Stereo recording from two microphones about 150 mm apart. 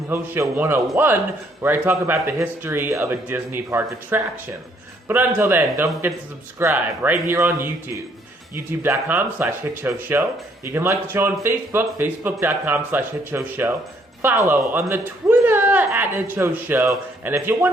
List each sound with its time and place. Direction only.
0.1 s speech: 15° right (ahead or behind)